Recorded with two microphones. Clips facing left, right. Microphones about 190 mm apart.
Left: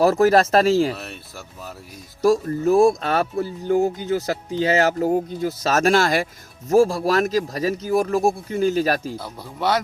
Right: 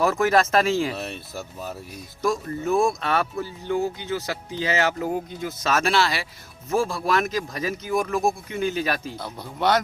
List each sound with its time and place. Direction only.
0.0 s speech: 35° left (ahead or behind)
0.9 s speech: 20° right (ahead or behind)
2.2 s speech: 40° left (ahead or behind)
9.1 s speech: 5° left (ahead or behind)